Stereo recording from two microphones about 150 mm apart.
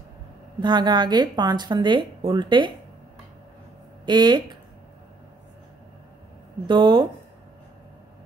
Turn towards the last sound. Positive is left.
turn(degrees=-30)  # may be behind; listen again after turning